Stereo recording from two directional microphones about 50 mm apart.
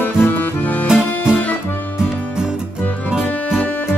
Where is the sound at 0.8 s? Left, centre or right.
Centre.